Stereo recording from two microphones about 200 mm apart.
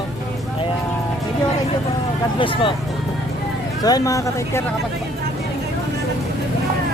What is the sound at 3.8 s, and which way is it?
Speech, 15° left (ahead or behind).